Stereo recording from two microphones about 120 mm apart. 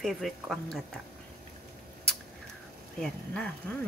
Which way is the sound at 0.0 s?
Centre (ahead or behind).